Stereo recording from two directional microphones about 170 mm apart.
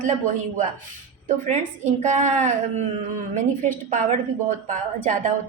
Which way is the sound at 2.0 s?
45° right (ahead or behind).